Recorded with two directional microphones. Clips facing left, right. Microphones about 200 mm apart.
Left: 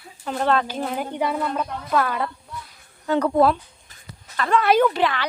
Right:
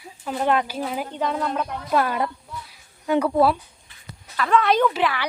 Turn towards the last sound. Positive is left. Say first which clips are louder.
# left 2 dB
turn(degrees=-5)  # may be behind; listen again after turning